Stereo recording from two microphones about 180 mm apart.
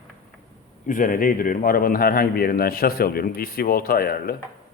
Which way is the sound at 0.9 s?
50° left (ahead or behind).